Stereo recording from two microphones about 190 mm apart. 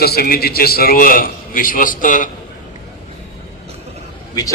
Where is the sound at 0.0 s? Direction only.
55° left (ahead or behind).